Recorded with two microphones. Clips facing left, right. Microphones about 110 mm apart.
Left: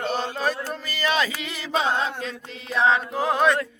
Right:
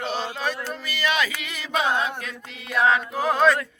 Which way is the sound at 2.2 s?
30° left (ahead or behind).